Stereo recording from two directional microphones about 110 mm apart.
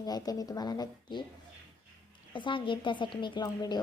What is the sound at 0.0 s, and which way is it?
A woman's voice, 35° left (ahead or behind).